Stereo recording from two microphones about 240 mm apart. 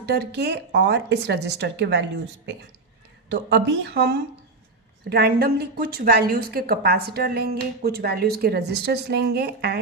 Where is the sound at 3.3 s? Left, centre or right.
Right.